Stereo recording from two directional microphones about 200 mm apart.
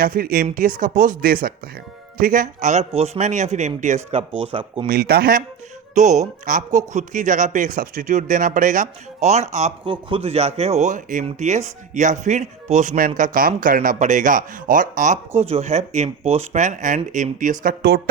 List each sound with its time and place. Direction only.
0.0 s speech: 45° right (ahead or behind); by 4.9 s 25° right (ahead or behind)
4.9 s speech: 50° right (ahead or behind)
5.9 s speech: 35° right (ahead or behind)